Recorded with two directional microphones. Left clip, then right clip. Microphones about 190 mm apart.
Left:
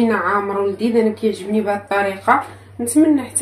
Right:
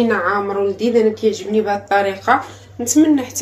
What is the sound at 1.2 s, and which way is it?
Speech, centre (ahead or behind).